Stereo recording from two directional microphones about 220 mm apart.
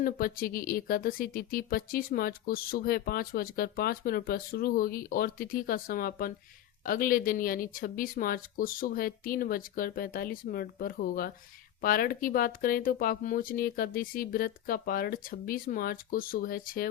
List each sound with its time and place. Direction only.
0.0 s speech: 40° left (ahead or behind)